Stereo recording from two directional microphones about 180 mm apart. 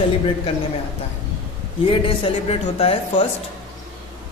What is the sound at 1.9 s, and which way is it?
Speech, 30° left (ahead or behind).